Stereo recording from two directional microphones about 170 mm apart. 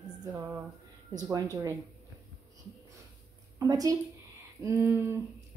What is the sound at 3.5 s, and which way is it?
A woman's voice, 20° right (ahead or behind).